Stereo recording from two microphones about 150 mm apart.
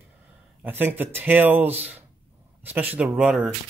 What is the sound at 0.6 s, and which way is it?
Speech, 15° right (ahead or behind).